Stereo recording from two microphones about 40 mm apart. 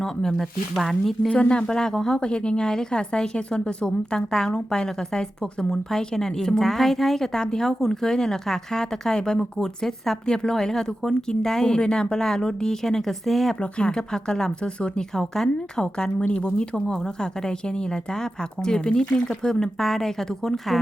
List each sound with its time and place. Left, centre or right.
0.0 s speech: centre
1.3 s speech: left; by 13.5 s centre
13.6 s speech: left
15.1 s speech: centre
16.8 s speech: centre